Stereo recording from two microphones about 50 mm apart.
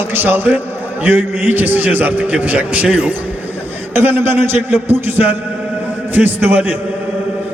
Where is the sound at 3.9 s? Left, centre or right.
Right.